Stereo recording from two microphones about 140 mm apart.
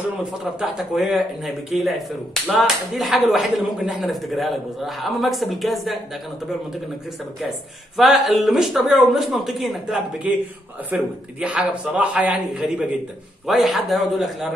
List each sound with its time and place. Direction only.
0.6 s speech: centre (ahead or behind)
8.0 s a man's voice: centre (ahead or behind)